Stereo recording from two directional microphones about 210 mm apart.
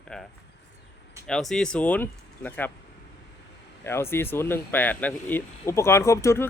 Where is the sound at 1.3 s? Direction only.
5° left (ahead or behind).